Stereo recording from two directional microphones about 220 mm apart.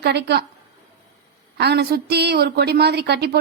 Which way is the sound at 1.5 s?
50° right (ahead or behind).